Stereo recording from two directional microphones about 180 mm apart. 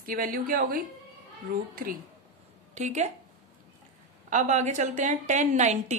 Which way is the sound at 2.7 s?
40° right (ahead or behind).